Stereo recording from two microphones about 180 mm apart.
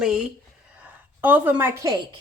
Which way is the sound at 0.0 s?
5° right (ahead or behind).